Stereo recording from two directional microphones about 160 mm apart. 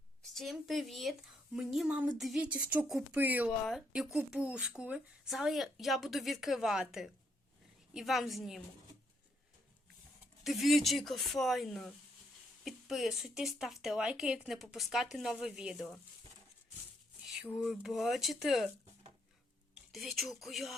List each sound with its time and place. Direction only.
0.3 s speech: centre (ahead or behind)
10.4 s speech: centre (ahead or behind)
17.2 s speech: 5° right (ahead or behind)
19.9 s speech: centre (ahead or behind)